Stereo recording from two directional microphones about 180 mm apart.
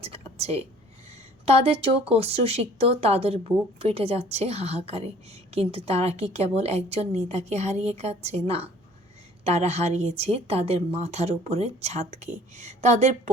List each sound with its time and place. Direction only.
0.0 s a woman's voice: 35° right (ahead or behind)